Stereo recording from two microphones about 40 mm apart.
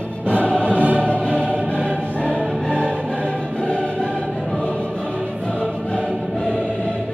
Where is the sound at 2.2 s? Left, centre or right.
Left.